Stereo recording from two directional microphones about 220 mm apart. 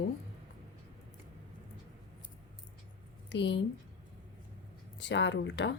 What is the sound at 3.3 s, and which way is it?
Speech, 50° left (ahead or behind).